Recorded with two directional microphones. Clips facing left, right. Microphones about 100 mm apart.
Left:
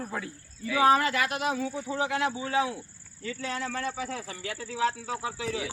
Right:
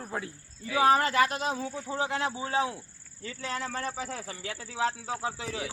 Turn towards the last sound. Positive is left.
turn(degrees=-30)  # may be behind; listen again after turning